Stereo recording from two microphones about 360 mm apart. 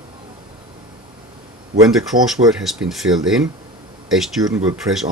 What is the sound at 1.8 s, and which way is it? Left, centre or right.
Speech, centre.